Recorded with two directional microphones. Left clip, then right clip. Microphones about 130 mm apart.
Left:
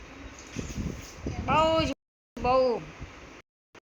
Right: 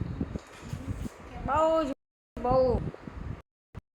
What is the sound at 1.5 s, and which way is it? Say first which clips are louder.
Speech: left 1 dB; 10° left (ahead or behind).